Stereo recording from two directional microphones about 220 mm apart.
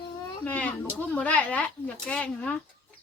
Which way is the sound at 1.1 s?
5° left (ahead or behind).